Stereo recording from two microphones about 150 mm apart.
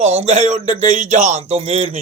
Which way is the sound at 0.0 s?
45° right (ahead or behind).